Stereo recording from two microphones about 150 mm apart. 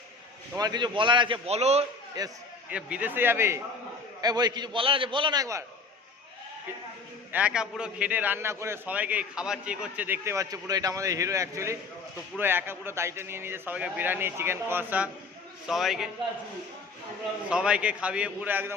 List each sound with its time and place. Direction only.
0.5 s a man's voice: 25° right (ahead or behind); by 1.9 s 45° right (ahead or behind)
2.2 s a man's voice: 25° right (ahead or behind)
2.6 s a man's voice: 10° right (ahead or behind)
4.2 s a man's voice: 25° right (ahead or behind)
7.3 s a man's voice: 5° right (ahead or behind)
17.5 s a man's voice: 5° right (ahead or behind)